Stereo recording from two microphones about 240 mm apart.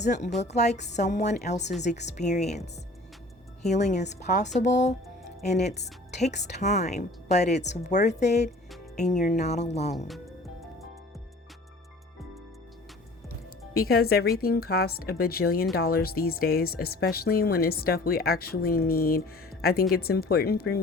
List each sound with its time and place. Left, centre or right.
0.3 s speech: left
5.7 s a woman's voice: left
6.1 s speech: left
13.7 s speech: left